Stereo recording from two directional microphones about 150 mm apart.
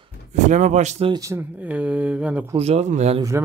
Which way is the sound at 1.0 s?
25° right (ahead or behind).